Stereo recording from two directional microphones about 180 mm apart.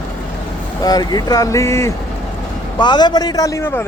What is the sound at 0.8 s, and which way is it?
A man's voice, 20° left (ahead or behind).